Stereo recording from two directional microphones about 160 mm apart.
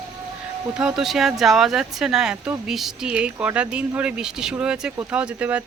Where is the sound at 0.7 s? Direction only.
5° right (ahead or behind).